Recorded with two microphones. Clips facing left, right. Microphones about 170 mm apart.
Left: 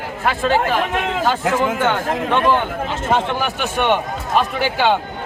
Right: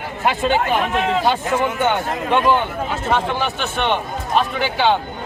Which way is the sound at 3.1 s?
10° left (ahead or behind).